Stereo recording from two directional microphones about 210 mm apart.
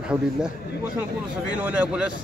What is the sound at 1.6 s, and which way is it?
Speech, 5° right (ahead or behind).